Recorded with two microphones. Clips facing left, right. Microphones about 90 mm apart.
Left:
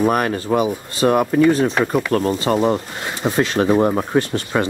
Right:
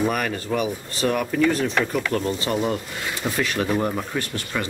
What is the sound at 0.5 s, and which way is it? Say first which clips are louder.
Speech: left 6 dB; 30° left (ahead or behind).